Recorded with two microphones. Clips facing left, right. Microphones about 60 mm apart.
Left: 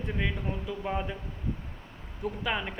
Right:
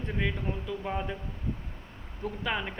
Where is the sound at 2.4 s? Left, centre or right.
Centre.